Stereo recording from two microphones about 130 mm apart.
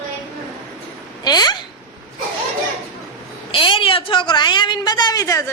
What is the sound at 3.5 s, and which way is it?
A woman's voice, 40° left (ahead or behind).